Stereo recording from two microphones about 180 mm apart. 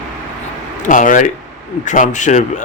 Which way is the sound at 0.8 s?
45° left (ahead or behind).